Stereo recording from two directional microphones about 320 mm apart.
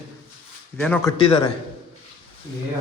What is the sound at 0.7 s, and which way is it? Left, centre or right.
Speech, centre.